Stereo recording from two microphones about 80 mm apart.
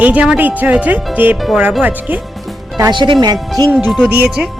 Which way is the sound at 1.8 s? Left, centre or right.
Right.